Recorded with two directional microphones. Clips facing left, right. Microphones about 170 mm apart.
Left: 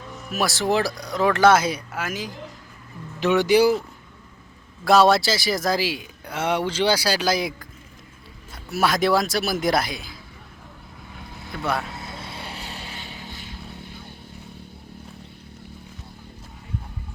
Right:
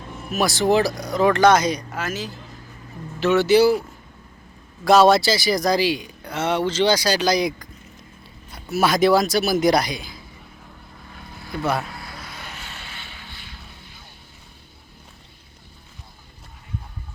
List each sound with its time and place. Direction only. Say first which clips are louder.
0.3 s speech: right 4 dB; centre (ahead or behind)
4.9 s speech: right 2 dB; centre (ahead or behind)
11.5 s speech: right 3 dB; centre (ahead or behind)
11.9 s vehicle: left 2 dB; 25° left (ahead or behind); by 13.5 s 40° left (ahead or behind)